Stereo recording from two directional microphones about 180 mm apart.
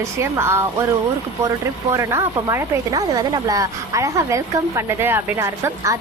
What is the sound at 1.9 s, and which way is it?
A woman's voice, 15° right (ahead or behind).